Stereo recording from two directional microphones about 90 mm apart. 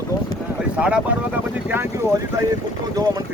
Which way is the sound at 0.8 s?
10° right (ahead or behind).